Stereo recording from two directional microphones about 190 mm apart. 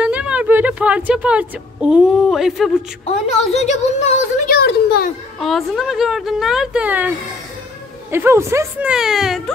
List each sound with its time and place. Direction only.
0.0 s speech: 5° right (ahead or behind)
3.1 s a woman's voice: 35° left (ahead or behind)
4.5 s speech: 55° left (ahead or behind)
5.4 s a woman's voice: centre (ahead or behind)
8.1 s speech: 15° right (ahead or behind)